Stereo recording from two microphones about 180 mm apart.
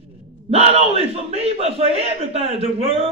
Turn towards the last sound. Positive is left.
turn(degrees=-30)  # may be behind; listen again after turning